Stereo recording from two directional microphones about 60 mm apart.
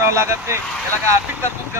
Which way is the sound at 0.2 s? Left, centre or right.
Right.